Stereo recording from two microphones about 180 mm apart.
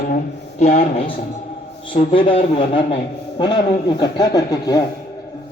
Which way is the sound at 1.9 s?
30° left (ahead or behind).